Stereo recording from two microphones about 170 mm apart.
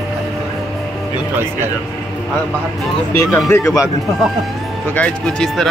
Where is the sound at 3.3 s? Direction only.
15° left (ahead or behind).